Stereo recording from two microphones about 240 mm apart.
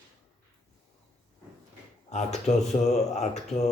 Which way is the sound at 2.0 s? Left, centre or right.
Left.